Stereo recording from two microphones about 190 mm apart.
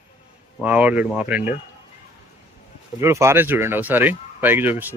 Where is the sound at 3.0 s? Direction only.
15° right (ahead or behind).